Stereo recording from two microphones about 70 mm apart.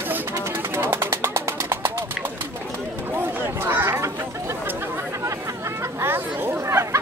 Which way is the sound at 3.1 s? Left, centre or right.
Right.